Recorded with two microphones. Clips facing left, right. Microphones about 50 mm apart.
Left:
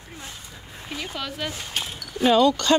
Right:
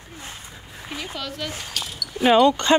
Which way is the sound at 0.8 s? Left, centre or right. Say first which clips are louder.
Even; centre.